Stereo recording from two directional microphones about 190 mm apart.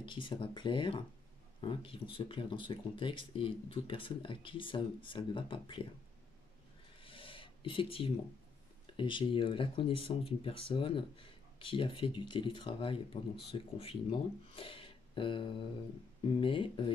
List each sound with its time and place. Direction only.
0.0 s speech: 25° left (ahead or behind)
7.0 s a sound: 30° left (ahead or behind)
8.9 s speech: 25° left (ahead or behind)